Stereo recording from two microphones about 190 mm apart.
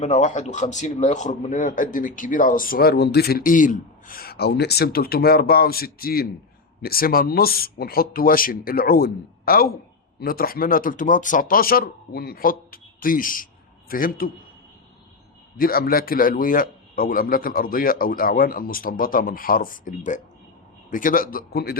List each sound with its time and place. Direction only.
0.0 s speech: 40° left (ahead or behind)
15.5 s speech: 50° left (ahead or behind)